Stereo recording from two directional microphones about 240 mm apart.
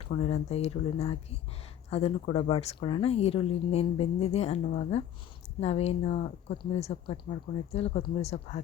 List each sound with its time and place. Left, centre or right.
0.0 s speech: left